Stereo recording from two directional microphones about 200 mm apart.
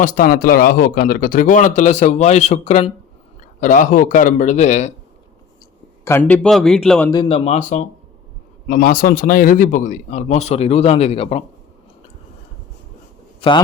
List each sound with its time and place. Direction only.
0.0 s speech: 45° left (ahead or behind)
6.1 s speech: 10° left (ahead or behind)
7.1 s speech: 25° left (ahead or behind)
13.4 s a man's voice: 25° left (ahead or behind)